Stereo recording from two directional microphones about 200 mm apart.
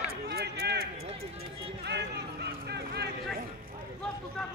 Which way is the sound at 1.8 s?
55° right (ahead or behind).